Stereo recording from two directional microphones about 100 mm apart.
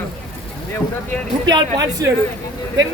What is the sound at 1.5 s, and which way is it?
Speech, 45° right (ahead or behind).